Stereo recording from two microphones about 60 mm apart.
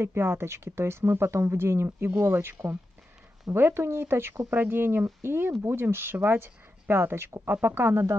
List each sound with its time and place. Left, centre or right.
0.0 s speech: right